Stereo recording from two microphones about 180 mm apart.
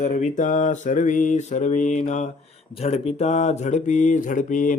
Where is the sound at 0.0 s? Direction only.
40° left (ahead or behind).